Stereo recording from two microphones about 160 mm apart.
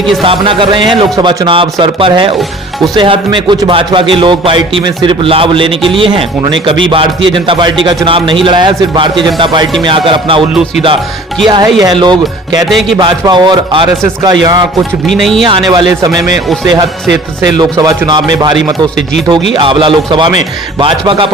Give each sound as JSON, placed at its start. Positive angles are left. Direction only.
{"t": 0.2, "sound": "speech", "side_deg": -35}
{"t": 11.4, "sound": "a man's voice", "side_deg": -30}
{"t": 12.6, "sound": "speech", "side_deg": 0}
{"t": 13.0, "sound": "a man's voice", "side_deg": -30}
{"t": 15.0, "sound": "speech", "side_deg": 0}
{"t": 15.4, "sound": "a man's voice", "side_deg": -30}
{"t": 19.3, "sound": "speech", "side_deg": -30}